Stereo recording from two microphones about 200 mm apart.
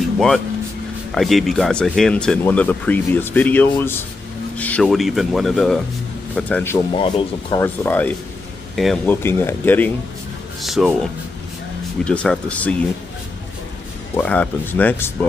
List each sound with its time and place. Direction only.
1.1 s speech: centre (ahead or behind)
7.0 s speech: 25° left (ahead or behind)
7.6 s speech: 10° left (ahead or behind)
10.6 s speech: centre (ahead or behind)
14.1 s speech: 5° left (ahead or behind)